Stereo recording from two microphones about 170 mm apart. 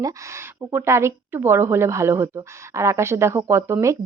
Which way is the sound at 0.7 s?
15° right (ahead or behind).